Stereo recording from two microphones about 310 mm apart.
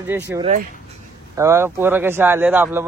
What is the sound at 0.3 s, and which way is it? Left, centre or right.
Speech, centre.